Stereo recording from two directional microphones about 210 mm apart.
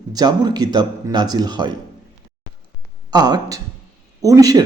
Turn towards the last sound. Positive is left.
turn(degrees=-15)  # may be behind; listen again after turning